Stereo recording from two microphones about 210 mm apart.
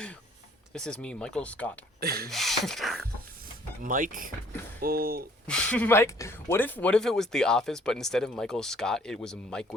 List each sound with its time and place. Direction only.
0.7 s speech: 5° left (ahead or behind)
2.0 s speech: 45° right (ahead or behind)
2.3 s speech: centre (ahead or behind)
3.8 s speech: 40° right (ahead or behind)
5.5 s speech: 5° left (ahead or behind)